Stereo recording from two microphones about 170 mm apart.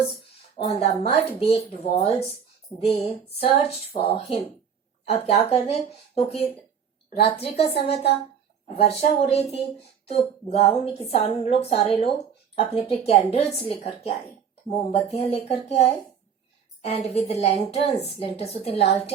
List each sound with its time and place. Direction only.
0.6 s a woman's voice: 35° left (ahead or behind)